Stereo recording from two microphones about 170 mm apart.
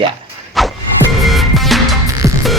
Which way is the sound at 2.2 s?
15° right (ahead or behind).